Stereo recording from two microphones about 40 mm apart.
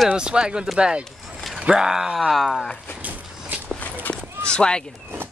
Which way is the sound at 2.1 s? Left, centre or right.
Centre.